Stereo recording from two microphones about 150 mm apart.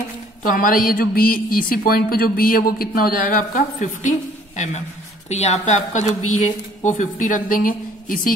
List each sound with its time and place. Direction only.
0.4 s a woman's voice: 65° left (ahead or behind)
5.3 s speech: 45° left (ahead or behind); by 8.4 s 70° left (ahead or behind)